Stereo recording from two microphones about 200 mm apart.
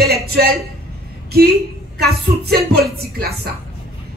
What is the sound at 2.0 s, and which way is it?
Speech, 55° right (ahead or behind).